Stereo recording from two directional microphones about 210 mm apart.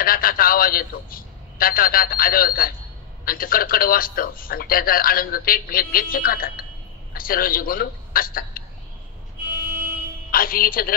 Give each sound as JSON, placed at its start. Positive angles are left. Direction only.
{"t": 0.0, "sound": "a man's voice", "side_deg": 45}
{"t": 10.3, "sound": "speech", "side_deg": 45}